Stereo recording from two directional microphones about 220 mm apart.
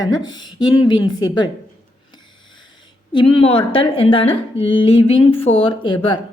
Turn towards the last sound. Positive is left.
turn(degrees=25)  # may be behind; listen again after turning